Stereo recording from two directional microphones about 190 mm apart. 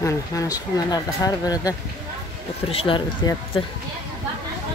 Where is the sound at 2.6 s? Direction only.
30° left (ahead or behind).